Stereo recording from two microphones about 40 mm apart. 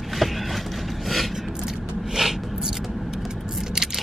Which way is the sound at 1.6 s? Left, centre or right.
Centre.